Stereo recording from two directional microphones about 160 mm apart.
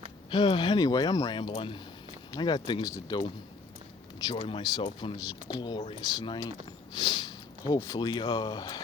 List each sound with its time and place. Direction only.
0.3 s speech: 25° left (ahead or behind)